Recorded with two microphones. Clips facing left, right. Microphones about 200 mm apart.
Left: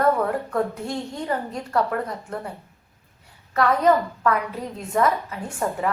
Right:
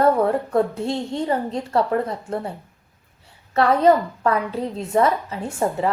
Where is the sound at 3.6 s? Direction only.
30° right (ahead or behind).